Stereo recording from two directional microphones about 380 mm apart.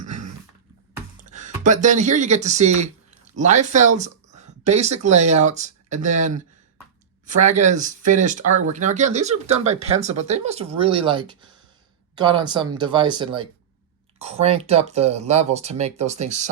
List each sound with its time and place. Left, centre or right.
1.2 s speech: centre